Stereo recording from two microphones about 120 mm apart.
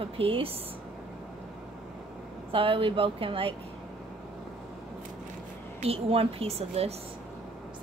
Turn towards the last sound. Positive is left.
turn(degrees=-60)  # may be behind; listen again after turning